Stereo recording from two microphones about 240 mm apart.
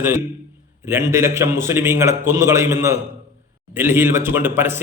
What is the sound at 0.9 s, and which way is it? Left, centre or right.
A man's voice, centre.